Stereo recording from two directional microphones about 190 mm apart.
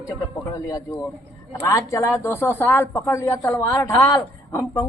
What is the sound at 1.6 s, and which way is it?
A woman's voice, 15° left (ahead or behind).